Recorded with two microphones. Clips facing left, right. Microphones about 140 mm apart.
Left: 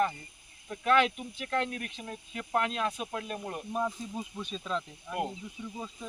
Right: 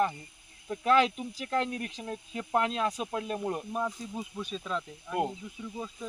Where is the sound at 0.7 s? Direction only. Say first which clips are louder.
Right 1 dB; 30° right (ahead or behind).